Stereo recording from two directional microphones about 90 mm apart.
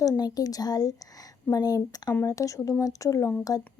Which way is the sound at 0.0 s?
40° left (ahead or behind).